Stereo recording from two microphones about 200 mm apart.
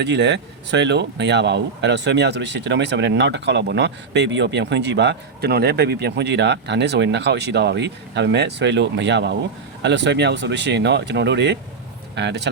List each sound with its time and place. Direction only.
0.0 s speech: 60° right (ahead or behind)